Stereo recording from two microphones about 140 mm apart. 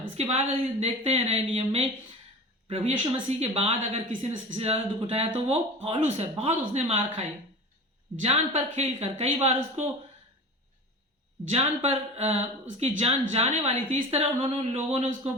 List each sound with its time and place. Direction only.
0.2 s a woman's voice: 45° right (ahead or behind)
11.4 s a woman's voice: 45° right (ahead or behind)